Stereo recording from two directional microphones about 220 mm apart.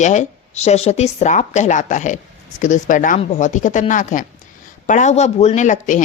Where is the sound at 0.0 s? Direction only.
35° left (ahead or behind).